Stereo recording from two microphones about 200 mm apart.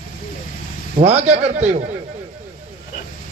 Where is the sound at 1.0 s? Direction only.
30° right (ahead or behind).